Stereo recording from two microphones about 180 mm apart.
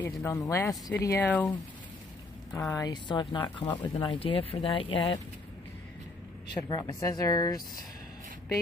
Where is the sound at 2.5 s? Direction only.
20° left (ahead or behind).